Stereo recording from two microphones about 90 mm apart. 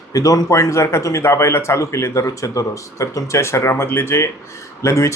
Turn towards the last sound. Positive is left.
turn(degrees=30)  # may be behind; listen again after turning